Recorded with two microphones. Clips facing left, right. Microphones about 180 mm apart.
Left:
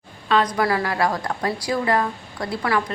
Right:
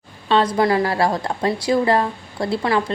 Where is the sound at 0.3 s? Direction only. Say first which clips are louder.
Right 3 dB; 30° right (ahead or behind).